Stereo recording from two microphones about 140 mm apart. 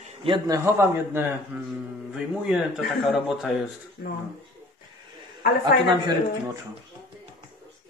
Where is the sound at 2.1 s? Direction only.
5° right (ahead or behind).